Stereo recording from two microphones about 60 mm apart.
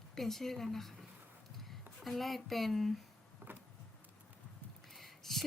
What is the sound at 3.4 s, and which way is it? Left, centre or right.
Power windows, right.